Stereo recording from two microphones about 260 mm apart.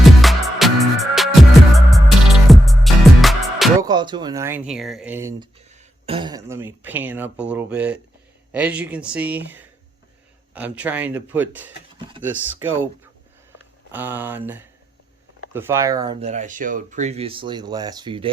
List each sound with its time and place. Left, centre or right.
0.2 s music: centre
3.8 s speech: centre
5.6 s speech: right